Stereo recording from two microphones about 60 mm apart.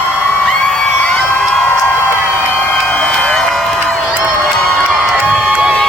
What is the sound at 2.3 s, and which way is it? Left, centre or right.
Crowd, left.